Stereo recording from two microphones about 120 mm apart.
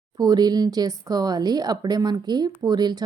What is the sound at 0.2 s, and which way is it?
A woman's voice, 35° right (ahead or behind).